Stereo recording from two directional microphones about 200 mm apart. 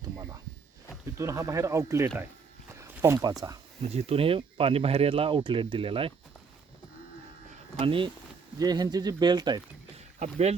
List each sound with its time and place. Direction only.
1.0 s speech: 15° right (ahead or behind)
2.7 s a sound: 15° right (ahead or behind)
3.8 s speech: 30° right (ahead or behind)
7.8 s speech: 25° right (ahead or behind)
10.2 s speech: 35° right (ahead or behind)